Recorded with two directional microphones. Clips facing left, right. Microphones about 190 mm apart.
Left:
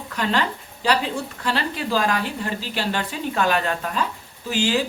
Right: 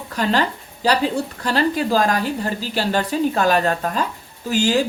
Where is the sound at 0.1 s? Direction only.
35° right (ahead or behind).